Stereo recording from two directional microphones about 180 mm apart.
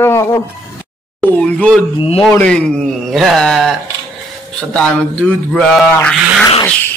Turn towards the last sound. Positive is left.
turn(degrees=10)  # may be behind; listen again after turning